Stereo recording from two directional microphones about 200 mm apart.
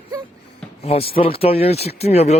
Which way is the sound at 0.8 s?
30° left (ahead or behind).